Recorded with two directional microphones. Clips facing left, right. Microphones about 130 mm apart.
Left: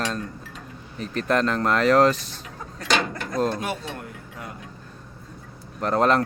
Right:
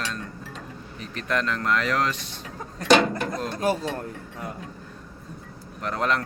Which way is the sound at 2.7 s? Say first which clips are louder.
Right 6 dB; 30° right (ahead or behind).